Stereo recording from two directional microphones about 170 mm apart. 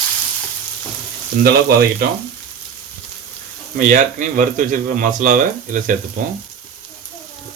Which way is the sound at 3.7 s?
50° right (ahead or behind).